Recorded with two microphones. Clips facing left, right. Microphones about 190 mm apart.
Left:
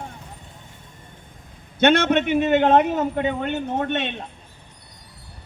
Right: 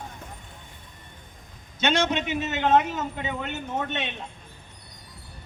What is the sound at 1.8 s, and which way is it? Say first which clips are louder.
A man's voice: left 7 dB; 60° left (ahead or behind).